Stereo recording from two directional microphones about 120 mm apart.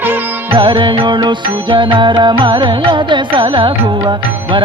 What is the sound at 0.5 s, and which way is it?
Music, 45° right (ahead or behind).